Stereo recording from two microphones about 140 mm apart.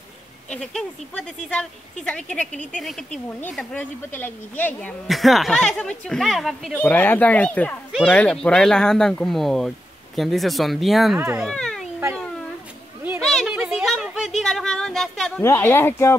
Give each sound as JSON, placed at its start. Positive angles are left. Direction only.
{"t": 0.5, "sound": "speech", "side_deg": 5}
{"t": 3.7, "sound": "speech", "side_deg": 15}
{"t": 5.0, "sound": "speech", "side_deg": 0}
{"t": 6.8, "sound": "speech", "side_deg": 15}
{"t": 11.1, "sound": "speech", "side_deg": -15}
{"t": 11.4, "sound": "a sound", "side_deg": 5}
{"t": 13.2, "sound": "a sound", "side_deg": 0}
{"t": 14.4, "sound": "speech", "side_deg": 5}
{"t": 15.4, "sound": "speech", "side_deg": 15}